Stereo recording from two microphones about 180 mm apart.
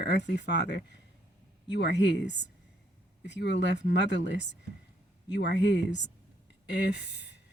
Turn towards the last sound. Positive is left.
turn(degrees=70)  # may be behind; listen again after turning